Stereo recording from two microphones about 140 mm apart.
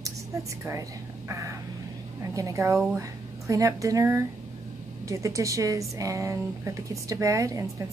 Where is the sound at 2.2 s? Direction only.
25° right (ahead or behind).